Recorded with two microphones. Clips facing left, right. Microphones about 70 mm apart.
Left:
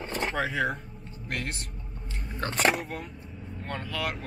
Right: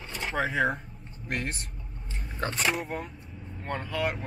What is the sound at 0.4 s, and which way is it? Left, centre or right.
Speech, centre.